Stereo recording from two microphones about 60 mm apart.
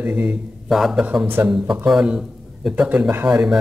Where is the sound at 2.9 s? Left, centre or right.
Right.